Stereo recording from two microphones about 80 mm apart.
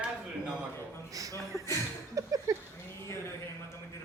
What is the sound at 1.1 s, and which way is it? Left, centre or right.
Speech, right.